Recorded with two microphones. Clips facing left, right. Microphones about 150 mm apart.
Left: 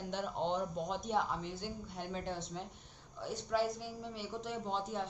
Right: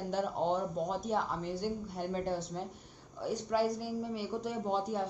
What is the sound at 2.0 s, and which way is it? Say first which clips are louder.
A woman's voice: right 6 dB; 5° right (ahead or behind).